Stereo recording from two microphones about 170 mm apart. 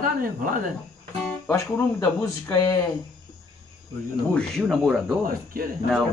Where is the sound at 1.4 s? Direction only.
15° left (ahead or behind).